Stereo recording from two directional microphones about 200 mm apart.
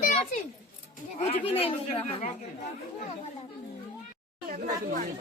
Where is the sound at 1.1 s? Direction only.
30° left (ahead or behind).